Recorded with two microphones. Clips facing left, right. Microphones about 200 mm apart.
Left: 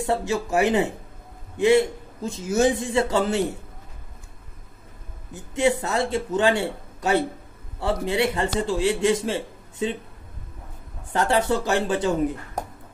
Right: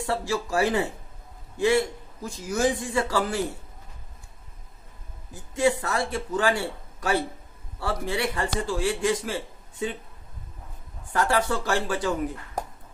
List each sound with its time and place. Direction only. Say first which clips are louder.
0.0 s a man's voice: left 3 dB; 20° left (ahead or behind)
5.3 s a man's voice: left 2 dB; 20° left (ahead or behind)
11.1 s a man's voice: left 3 dB; 25° left (ahead or behind)